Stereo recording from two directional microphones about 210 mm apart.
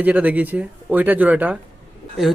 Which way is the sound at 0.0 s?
10° right (ahead or behind).